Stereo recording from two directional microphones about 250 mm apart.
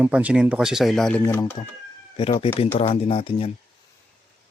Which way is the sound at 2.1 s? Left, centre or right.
Left.